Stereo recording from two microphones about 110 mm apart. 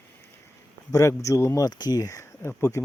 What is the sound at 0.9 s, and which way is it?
Speech, 30° left (ahead or behind).